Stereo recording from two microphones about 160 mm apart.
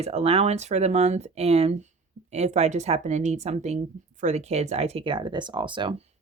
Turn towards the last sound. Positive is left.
turn(degrees=-30)  # may be behind; listen again after turning